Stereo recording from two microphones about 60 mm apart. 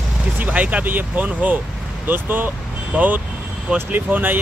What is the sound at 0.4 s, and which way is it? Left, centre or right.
Speech, right.